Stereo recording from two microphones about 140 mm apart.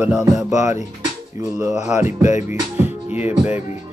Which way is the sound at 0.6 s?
60° left (ahead or behind).